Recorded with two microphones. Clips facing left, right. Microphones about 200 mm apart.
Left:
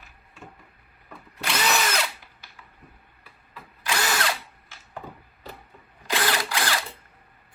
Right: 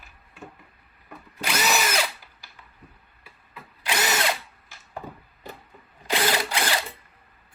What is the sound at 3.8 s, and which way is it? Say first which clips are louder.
Drill: right 1 dB; 20° right (ahead or behind).